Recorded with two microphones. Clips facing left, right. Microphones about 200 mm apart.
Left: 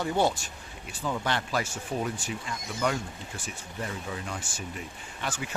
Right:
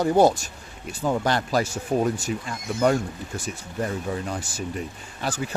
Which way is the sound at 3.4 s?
40° right (ahead or behind).